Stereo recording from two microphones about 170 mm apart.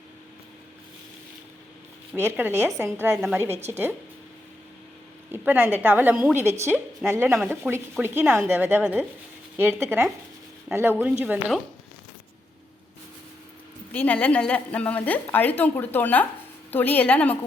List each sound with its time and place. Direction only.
2.1 s a woman's voice: 10° right (ahead or behind)
5.3 s a woman's voice: 10° right (ahead or behind)
13.9 s a woman's voice: 10° left (ahead or behind)